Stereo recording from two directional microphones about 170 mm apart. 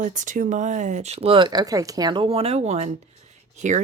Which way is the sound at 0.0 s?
50° right (ahead or behind).